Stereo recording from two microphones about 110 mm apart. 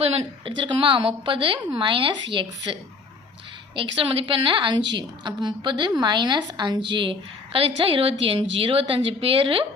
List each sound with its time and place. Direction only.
0.0 s a woman's voice: 55° right (ahead or behind)
3.8 s a woman's voice: 50° right (ahead or behind)